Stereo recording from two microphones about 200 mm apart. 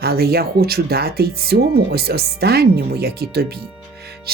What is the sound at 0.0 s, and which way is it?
Speech, 50° right (ahead or behind).